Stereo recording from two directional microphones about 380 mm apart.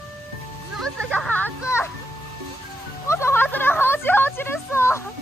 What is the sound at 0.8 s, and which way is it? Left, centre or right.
A woman's voice, centre.